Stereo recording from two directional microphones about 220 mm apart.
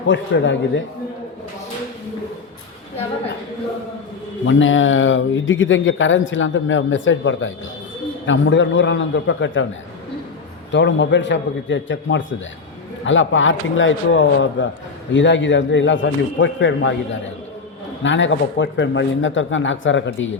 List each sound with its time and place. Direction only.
0.1 s speech: 55° left (ahead or behind)
4.4 s speech: 60° left (ahead or behind)
10.7 s speech: 55° left (ahead or behind)
18.0 s speech: 55° left (ahead or behind)